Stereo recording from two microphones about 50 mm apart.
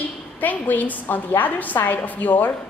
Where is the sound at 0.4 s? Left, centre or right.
Left.